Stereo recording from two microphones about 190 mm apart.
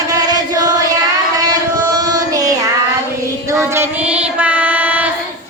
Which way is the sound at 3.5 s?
15° right (ahead or behind).